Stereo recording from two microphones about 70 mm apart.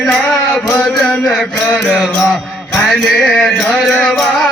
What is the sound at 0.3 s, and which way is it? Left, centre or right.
Mantra, centre.